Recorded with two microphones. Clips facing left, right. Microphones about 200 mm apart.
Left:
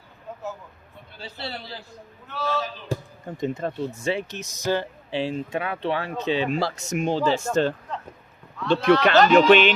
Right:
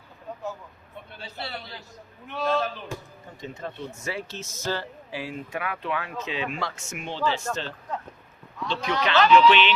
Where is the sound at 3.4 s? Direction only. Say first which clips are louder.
Left 9 dB; 55° left (ahead or behind).